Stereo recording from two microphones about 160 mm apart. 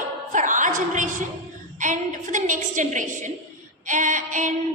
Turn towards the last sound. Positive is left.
turn(degrees=-55)  # may be behind; listen again after turning